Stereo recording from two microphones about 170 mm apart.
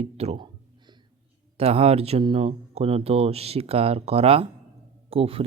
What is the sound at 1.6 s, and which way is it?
Speech, 35° right (ahead or behind).